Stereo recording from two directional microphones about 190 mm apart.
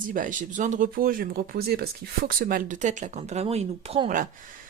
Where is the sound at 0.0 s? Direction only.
45° right (ahead or behind).